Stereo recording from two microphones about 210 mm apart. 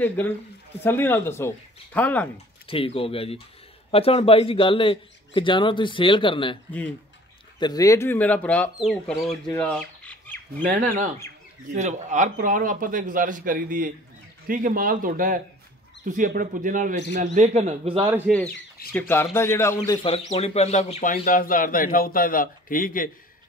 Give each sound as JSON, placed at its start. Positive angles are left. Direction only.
{"t": 0.8, "sound": "speech", "side_deg": 10}
{"t": 2.3, "sound": "a man's voice", "side_deg": 25}
{"t": 9.5, "sound": "squawk", "side_deg": 5}
{"t": 11.7, "sound": "speech", "side_deg": -35}
{"t": 18.9, "sound": "speech", "side_deg": 10}
{"t": 20.0, "sound": "speech", "side_deg": 30}